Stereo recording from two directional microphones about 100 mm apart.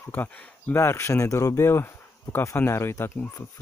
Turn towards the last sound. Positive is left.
turn(degrees=25)  # may be behind; listen again after turning